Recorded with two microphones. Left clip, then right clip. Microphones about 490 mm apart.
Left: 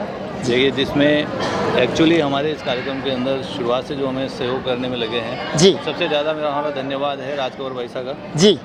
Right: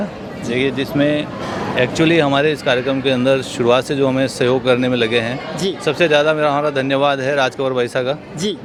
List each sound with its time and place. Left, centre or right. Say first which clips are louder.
0.5 s speech: left 1 dB; right
1.7 s a man's voice: right 2 dB; right
8.4 s speech: left 9 dB; left